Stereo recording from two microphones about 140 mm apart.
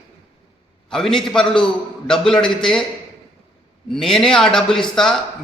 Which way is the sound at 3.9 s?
5° left (ahead or behind).